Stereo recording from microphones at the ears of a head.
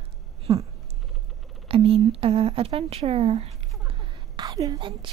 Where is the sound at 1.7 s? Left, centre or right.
Right.